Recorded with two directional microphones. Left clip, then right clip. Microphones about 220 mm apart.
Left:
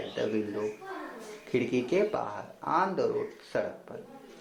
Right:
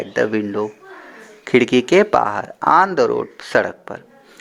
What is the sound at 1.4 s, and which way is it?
Speech, 45° right (ahead or behind).